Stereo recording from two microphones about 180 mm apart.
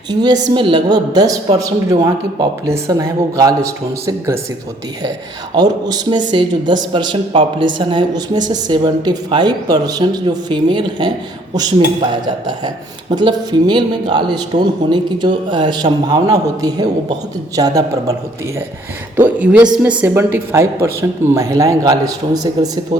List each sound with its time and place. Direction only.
0.1 s a woman's voice: 25° right (ahead or behind)
5.5 s a woman's voice: 20° right (ahead or behind)
12.1 s a woman's voice: 25° right (ahead or behind)
19.4 s a woman's voice: 5° right (ahead or behind)